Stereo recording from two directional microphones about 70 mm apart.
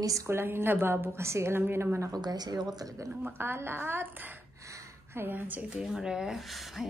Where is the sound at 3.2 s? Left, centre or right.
Right.